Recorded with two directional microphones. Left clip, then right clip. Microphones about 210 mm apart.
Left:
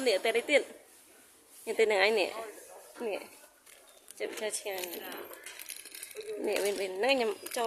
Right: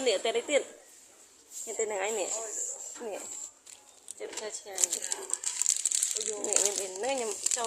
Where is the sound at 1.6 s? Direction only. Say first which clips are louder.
Left 6 dB; 40° left (ahead or behind).